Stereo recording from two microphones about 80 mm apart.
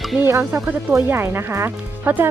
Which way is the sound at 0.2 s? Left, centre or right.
Right.